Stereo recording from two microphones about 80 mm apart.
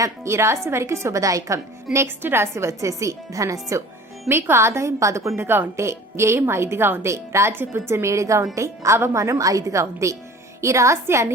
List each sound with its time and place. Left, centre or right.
0.0 s a woman's voice: right
4.3 s a woman's voice: right